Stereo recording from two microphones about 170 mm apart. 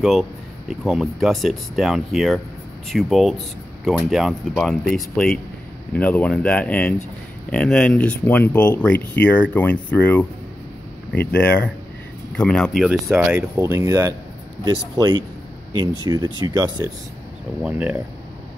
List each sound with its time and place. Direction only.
0.0 s speech: centre (ahead or behind)
13.1 s speech: 10° right (ahead or behind); by 15.2 s 25° right (ahead or behind)
16.3 s speech: 25° right (ahead or behind)
17.6 s speech: 5° right (ahead or behind)